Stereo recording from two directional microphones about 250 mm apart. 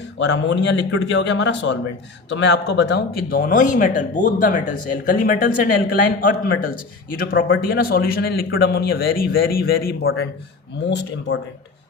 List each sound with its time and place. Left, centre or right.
0.2 s a man's voice: left
7.3 s a man's voice: left